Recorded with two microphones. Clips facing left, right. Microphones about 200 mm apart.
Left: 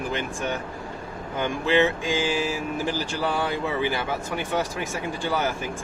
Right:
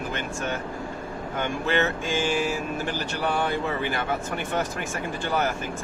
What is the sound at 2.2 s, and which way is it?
Speech, 90° left.